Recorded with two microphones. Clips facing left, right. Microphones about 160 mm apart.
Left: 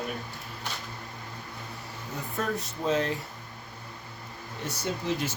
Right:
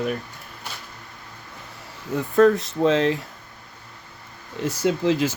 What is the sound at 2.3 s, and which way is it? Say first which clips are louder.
Speech: right 16 dB; 90° right.